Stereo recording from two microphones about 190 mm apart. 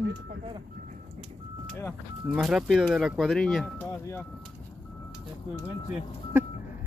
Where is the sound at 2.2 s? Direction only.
5° right (ahead or behind).